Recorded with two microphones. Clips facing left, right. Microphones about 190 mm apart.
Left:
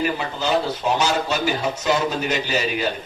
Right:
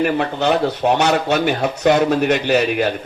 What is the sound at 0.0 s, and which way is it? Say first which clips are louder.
Speech: right 6 dB; 65° right (ahead or behind).